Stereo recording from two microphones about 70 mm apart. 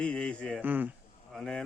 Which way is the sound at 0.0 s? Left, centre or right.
Centre.